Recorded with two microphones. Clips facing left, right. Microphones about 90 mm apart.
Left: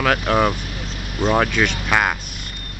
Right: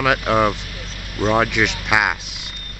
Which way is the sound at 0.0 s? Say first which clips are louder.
Right 1 dB; 10° right (ahead or behind).